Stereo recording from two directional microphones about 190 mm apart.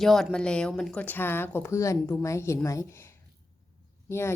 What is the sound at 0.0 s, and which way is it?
Speech, centre (ahead or behind).